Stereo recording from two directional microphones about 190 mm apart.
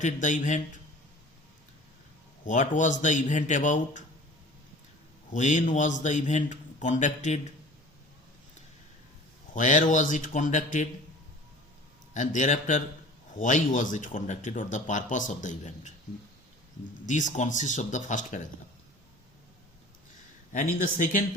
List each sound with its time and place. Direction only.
0.0 s a man's voice: 40° left (ahead or behind)
2.4 s a man's voice: 40° left (ahead or behind)
5.3 s a man's voice: 40° left (ahead or behind)
9.5 s a man's voice: 40° left (ahead or behind)
12.1 s a man's voice: 40° left (ahead or behind)
17.1 s a man's voice: 40° left (ahead or behind)
20.5 s a man's voice: 45° left (ahead or behind)